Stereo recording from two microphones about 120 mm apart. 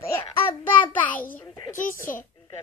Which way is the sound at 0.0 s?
20° left (ahead or behind).